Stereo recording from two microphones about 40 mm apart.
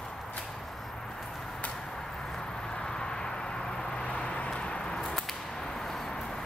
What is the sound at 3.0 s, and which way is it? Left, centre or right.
Vehicle, centre.